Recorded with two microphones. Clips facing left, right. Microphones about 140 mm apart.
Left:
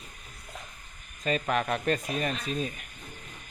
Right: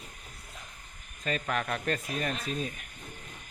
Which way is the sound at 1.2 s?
15° left (ahead or behind).